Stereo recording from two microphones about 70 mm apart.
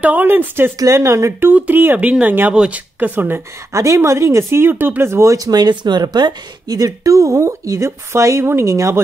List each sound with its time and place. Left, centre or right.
0.0 s speech: right
0.7 s speech: right
1.5 s speech: right
2.5 s speech: centre
3.0 s speech: right
3.7 s speech: right